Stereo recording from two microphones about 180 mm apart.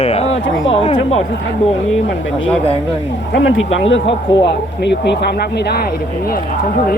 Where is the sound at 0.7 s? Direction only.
30° left (ahead or behind).